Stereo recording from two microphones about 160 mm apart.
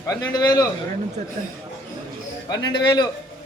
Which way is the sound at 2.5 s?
30° left (ahead or behind).